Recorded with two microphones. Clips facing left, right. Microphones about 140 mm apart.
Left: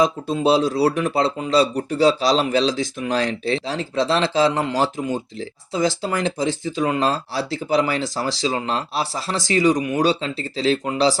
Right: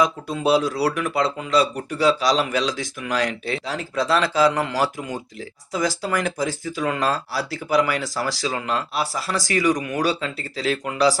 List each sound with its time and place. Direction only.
0.0 s speech: 25° left (ahead or behind)